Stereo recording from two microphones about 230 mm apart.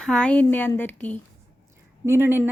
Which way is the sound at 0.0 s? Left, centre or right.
Centre.